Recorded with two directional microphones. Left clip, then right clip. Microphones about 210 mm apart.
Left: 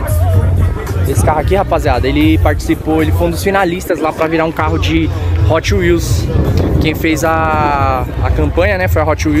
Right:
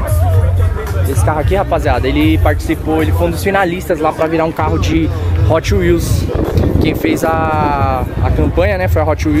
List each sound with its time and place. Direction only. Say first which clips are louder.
1.2 s speech: left 2 dB; 25° left (ahead or behind)
3.9 s speech: right 1 dB; 10° left (ahead or behind)